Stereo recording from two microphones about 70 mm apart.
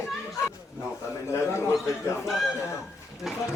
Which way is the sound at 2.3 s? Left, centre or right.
Centre.